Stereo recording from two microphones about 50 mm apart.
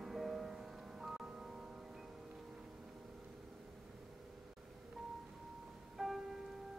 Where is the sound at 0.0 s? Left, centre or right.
Centre.